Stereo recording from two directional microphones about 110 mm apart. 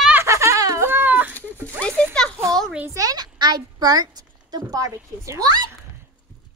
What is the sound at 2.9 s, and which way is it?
A child's voice, 35° right (ahead or behind).